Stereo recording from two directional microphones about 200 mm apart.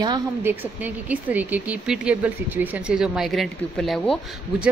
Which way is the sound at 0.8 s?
10° right (ahead or behind).